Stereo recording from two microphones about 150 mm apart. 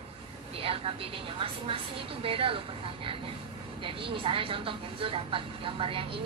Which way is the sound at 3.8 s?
35° right (ahead or behind).